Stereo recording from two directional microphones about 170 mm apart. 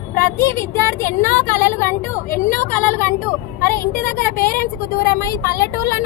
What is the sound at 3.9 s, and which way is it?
Speech, 55° left (ahead or behind).